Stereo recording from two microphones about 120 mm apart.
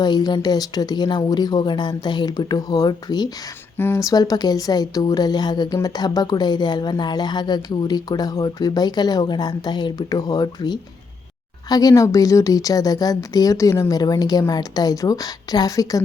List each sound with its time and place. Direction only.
0.0 s a woman's voice: 35° left (ahead or behind)
3.8 s a woman's voice: 20° left (ahead or behind)